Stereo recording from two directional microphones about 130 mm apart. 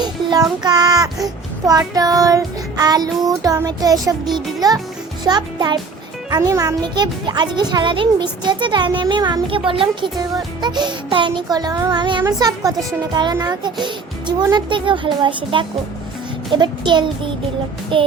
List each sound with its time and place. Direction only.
0.0 s child singing: 35° right (ahead or behind)
5.2 s a child's voice: 35° right (ahead or behind)
12.4 s child singing: 30° right (ahead or behind)
13.4 s a child's voice: 30° right (ahead or behind)